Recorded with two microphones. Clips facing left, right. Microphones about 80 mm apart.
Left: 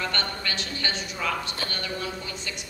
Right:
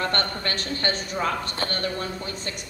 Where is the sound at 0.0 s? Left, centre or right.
Right.